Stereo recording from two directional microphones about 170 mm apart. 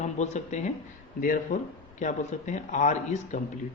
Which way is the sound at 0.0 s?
45° left (ahead or behind).